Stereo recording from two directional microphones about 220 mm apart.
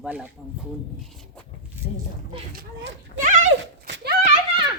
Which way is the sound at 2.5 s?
40° right (ahead or behind).